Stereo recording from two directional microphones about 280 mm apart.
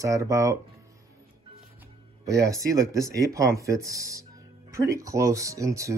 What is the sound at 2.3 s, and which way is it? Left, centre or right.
Speech, centre.